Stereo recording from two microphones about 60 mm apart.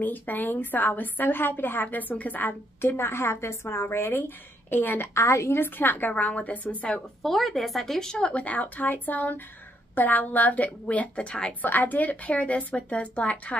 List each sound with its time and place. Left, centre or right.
0.0 s a woman's voice: left
2.9 s a woman's voice: left
5.1 s a woman's voice: left
5.6 s a woman's voice: left
7.2 s a woman's voice: centre; by 13.6 s left